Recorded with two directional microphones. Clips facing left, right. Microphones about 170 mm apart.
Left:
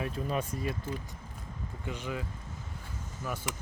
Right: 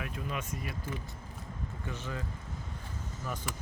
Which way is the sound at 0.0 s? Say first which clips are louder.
Left 5 dB; 35° left (ahead or behind).